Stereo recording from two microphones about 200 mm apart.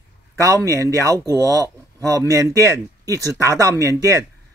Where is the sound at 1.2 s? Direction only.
15° right (ahead or behind).